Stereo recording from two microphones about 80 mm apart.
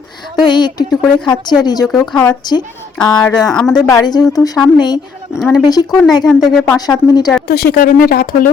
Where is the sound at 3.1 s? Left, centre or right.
Centre.